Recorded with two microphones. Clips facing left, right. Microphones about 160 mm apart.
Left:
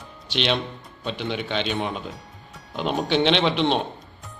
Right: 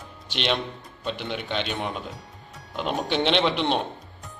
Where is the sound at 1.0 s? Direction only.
5° right (ahead or behind).